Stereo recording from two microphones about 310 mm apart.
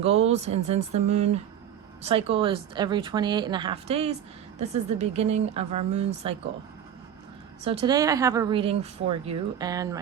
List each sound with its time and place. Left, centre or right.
0.0 s a woman's voice: centre
7.6 s a woman's voice: centre